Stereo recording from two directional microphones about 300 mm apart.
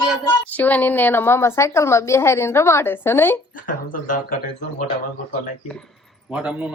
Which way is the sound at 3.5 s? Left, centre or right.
Left.